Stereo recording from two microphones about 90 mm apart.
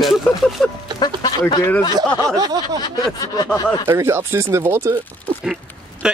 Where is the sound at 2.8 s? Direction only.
50° left (ahead or behind).